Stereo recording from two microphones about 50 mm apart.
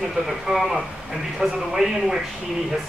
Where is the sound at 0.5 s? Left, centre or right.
Centre.